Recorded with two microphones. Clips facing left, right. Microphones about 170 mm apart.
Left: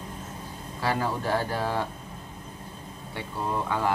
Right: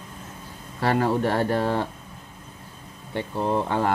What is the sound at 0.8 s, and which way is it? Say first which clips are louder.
Speech: right 6 dB; 65° right (ahead or behind).